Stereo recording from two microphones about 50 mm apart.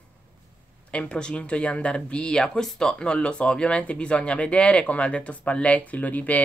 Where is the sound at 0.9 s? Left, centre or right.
Left.